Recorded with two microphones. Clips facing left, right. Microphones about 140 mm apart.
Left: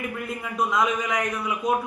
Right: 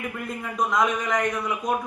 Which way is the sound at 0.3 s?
5° left (ahead or behind).